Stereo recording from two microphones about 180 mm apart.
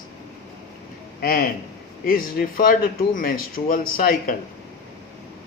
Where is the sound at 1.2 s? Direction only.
55° left (ahead or behind).